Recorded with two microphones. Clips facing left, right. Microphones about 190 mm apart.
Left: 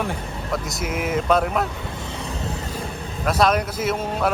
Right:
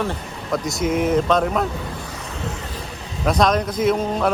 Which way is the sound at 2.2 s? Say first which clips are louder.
Left 3 dB; 35° left (ahead or behind).